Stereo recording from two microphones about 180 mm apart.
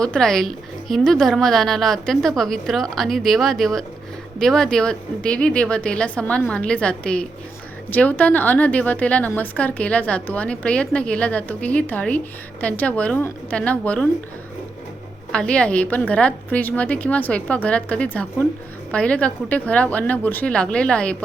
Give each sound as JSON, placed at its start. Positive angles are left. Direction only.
{"t": 0.0, "sound": "a woman's voice", "side_deg": 5}
{"t": 15.3, "sound": "a woman's voice", "side_deg": 5}